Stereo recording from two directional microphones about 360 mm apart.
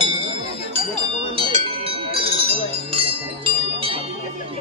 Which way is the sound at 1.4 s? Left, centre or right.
Centre.